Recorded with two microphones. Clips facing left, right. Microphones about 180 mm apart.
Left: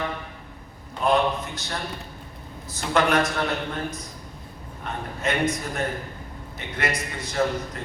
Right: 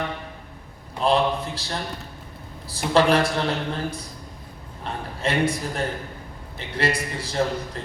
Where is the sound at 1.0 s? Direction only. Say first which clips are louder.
Right 1 dB; 30° right (ahead or behind).